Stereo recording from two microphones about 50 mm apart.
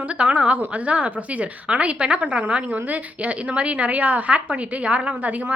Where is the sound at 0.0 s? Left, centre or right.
Right.